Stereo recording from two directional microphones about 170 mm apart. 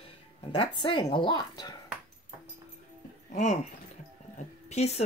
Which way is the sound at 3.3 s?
40° left (ahead or behind).